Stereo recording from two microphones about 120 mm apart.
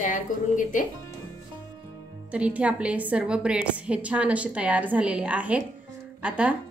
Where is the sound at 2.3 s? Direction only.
10° right (ahead or behind).